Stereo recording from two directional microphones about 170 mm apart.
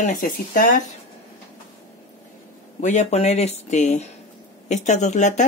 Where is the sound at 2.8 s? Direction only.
45° left (ahead or behind).